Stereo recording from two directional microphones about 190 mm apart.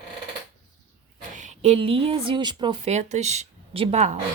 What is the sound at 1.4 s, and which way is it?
A woman's voice, 35° right (ahead or behind).